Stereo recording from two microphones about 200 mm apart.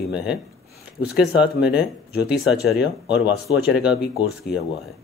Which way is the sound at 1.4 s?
5° right (ahead or behind).